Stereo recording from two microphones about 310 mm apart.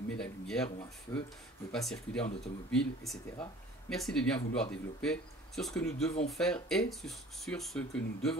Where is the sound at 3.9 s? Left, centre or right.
Centre.